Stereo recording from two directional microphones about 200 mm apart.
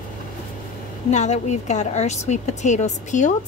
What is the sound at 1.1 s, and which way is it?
A woman's voice, 35° left (ahead or behind).